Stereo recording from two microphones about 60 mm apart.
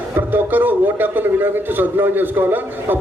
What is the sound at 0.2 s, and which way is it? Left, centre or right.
A man's voice, right.